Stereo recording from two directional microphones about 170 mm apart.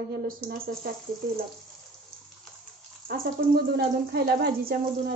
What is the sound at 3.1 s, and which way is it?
A woman's voice, 65° right (ahead or behind).